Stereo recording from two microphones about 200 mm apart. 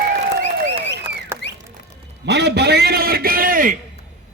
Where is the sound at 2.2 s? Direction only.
55° right (ahead or behind).